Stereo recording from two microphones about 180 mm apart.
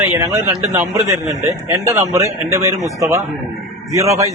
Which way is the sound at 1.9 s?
15° right (ahead or behind).